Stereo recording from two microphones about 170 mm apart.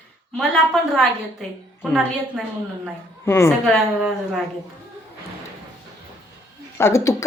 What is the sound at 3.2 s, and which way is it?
Speech, 15° left (ahead or behind).